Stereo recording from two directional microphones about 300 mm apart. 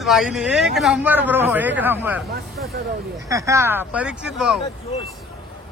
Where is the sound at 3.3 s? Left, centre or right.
Centre.